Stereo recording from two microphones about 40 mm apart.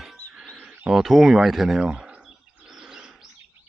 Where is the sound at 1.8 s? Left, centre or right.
Right.